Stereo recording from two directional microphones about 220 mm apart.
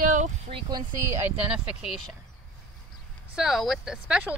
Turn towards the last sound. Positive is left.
turn(degrees=-5)  # may be behind; listen again after turning